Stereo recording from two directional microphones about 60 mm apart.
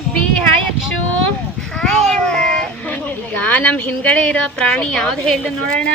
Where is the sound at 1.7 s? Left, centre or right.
Centre.